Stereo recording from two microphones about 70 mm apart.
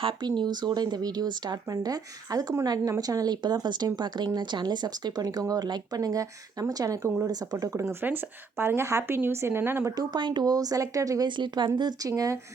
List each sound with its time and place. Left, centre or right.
0.2 s speech: right
1.7 s speech: right
8.0 s speech: right
9.9 s speech: right
11.8 s speech: right
12.1 s speech: right